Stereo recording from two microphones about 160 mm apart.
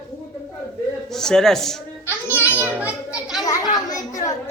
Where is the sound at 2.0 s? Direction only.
10° right (ahead or behind).